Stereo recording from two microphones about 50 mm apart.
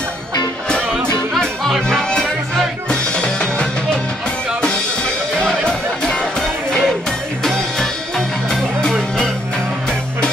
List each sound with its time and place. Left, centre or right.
1.9 s music: centre
5.7 s music: centre
6.8 s music: centre